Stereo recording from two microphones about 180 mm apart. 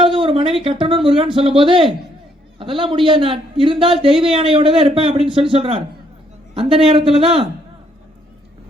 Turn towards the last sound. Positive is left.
turn(degrees=-30)  # may be behind; listen again after turning